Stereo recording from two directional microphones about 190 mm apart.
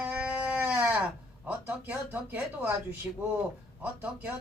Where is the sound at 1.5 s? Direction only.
10° right (ahead or behind).